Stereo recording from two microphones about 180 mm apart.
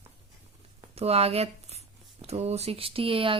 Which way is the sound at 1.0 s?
35° right (ahead or behind).